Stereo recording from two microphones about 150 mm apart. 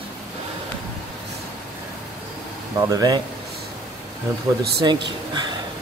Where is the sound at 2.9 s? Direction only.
25° right (ahead or behind).